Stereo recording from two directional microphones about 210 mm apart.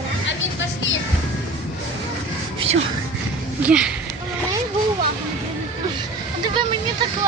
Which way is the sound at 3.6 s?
5° right (ahead or behind).